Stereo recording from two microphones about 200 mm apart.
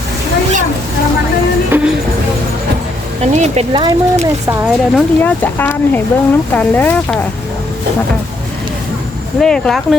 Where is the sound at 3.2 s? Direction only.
35° right (ahead or behind).